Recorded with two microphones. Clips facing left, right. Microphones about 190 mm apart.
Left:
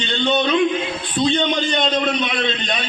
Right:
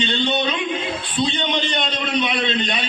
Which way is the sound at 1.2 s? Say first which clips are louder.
Left 4 dB; 45° left (ahead or behind).